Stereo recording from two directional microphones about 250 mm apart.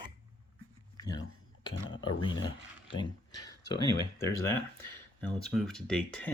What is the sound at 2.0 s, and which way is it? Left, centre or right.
Speech, centre.